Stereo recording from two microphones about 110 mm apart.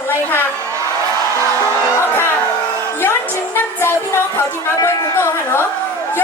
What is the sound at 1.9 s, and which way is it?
Speech, 20° left (ahead or behind).